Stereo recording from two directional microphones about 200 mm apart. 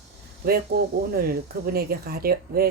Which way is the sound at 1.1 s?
50° right (ahead or behind).